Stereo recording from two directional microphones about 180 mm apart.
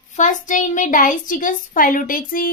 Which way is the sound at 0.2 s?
45° left (ahead or behind).